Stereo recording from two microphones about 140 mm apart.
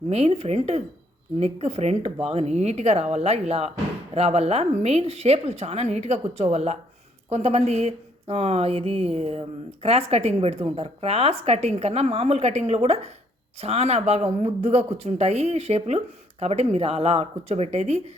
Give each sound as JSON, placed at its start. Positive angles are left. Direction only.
{"t": 0.1, "sound": "a woman's voice", "side_deg": -45}